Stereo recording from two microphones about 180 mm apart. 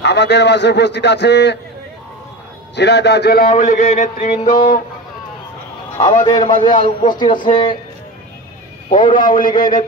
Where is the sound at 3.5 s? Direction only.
45° left (ahead or behind).